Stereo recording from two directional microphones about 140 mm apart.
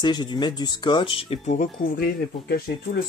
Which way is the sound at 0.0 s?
30° left (ahead or behind).